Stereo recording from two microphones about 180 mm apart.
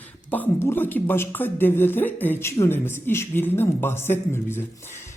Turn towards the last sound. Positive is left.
turn(degrees=10)  # may be behind; listen again after turning